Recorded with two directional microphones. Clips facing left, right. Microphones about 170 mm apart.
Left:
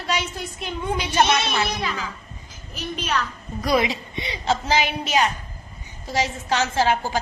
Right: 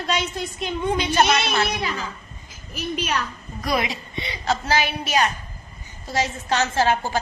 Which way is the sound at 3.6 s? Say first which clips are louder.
Left 3 dB; 25° left (ahead or behind).